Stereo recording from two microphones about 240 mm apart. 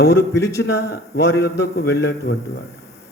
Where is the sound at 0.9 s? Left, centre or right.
Left.